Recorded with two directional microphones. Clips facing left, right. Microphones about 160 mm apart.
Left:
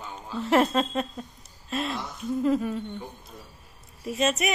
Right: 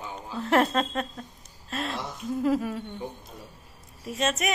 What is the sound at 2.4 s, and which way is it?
Speech, 5° right (ahead or behind).